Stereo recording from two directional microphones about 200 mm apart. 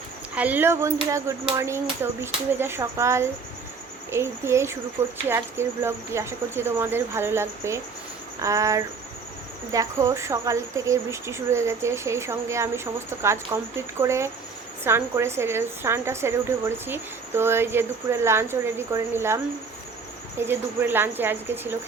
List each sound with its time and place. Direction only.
0.3 s a woman's voice: 10° right (ahead or behind)
20.5 s a woman's voice: 10° right (ahead or behind)